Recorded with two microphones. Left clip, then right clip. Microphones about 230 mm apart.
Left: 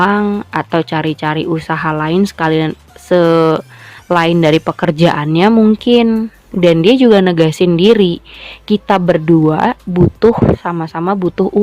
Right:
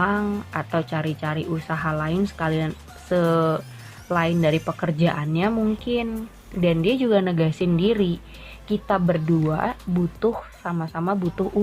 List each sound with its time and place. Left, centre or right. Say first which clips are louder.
0.0 s a woman's voice: left 10 dB; left